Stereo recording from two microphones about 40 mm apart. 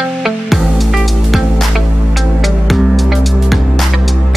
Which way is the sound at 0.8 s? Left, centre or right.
Centre.